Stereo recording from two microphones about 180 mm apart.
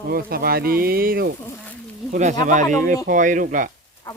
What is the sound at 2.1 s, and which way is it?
Speech, 40° right (ahead or behind).